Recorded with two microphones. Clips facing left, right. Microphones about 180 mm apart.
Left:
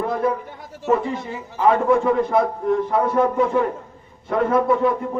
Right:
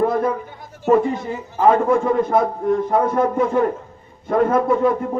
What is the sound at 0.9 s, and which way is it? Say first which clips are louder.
A man's voice: right 4 dB; 40° right (ahead or behind).